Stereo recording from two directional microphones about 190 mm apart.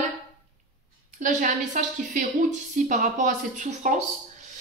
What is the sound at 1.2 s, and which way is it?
Speech, 40° right (ahead or behind).